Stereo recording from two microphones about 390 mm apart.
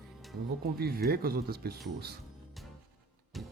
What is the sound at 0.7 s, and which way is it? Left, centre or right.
Speech, right.